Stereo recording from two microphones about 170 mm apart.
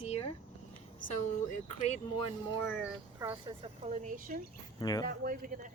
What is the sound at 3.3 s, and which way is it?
Speech, 25° right (ahead or behind).